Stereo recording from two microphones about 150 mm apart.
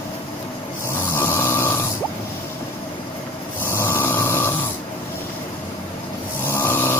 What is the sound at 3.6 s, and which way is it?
Snoring, 15° left (ahead or behind).